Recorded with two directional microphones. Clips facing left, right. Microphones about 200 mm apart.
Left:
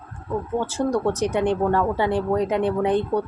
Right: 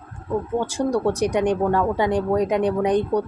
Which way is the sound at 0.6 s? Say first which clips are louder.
Even; 15° right (ahead or behind).